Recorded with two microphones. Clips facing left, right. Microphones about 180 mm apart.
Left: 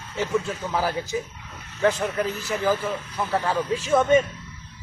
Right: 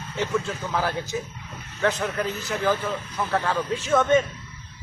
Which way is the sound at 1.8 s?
5° left (ahead or behind).